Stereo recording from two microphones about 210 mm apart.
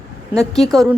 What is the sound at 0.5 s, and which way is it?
Speech, centre (ahead or behind).